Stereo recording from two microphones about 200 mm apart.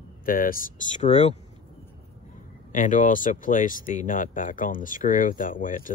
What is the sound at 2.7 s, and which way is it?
Speech, 40° left (ahead or behind).